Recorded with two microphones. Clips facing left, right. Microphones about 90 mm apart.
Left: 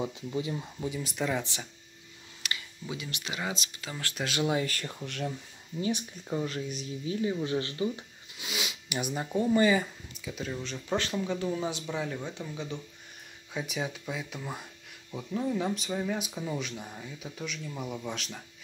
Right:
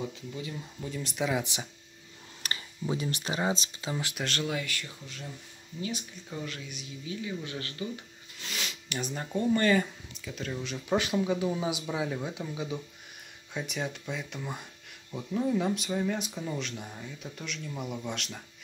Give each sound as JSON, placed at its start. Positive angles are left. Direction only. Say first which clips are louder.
{"t": 0.0, "sound": "speech", "louder": "left 4 dB", "side_deg": 25}
{"t": 0.8, "sound": "speech", "louder": "even", "side_deg": 5}
{"t": 1.4, "sound": "speech", "louder": "right 2 dB", "side_deg": -15}
{"t": 2.4, "sound": "speech", "louder": "right 4 dB", "side_deg": -35}
{"t": 3.9, "sound": "speech", "louder": "right 5 dB", "side_deg": -15}
{"t": 4.4, "sound": "speech", "louder": "left 6 dB", "side_deg": 25}
{"t": 4.6, "sound": "speech", "louder": "left 3 dB", "side_deg": 40}
{"t": 5.0, "sound": "speech", "louder": "left 9 dB", "side_deg": 65}
{"t": 5.8, "sound": "speech", "louder": "left 5 dB", "side_deg": 30}
{"t": 8.4, "sound": "speech", "louder": "left 2 dB", "side_deg": 10}